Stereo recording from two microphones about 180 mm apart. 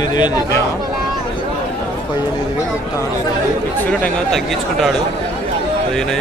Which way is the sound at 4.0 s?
Centre (ahead or behind).